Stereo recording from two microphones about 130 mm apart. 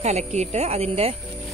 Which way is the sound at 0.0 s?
60° right (ahead or behind).